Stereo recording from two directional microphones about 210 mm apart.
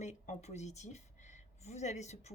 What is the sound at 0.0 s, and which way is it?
Speech, 35° left (ahead or behind).